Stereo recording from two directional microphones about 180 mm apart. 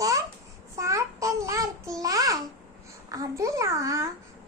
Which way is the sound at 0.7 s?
15° right (ahead or behind).